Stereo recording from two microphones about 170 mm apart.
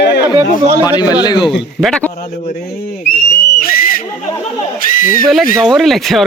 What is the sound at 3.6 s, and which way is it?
Whistle, 55° left (ahead or behind).